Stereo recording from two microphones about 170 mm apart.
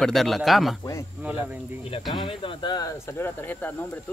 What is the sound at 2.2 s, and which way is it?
Speech, 30° left (ahead or behind).